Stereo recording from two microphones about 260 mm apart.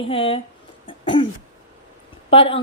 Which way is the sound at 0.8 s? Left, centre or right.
Centre.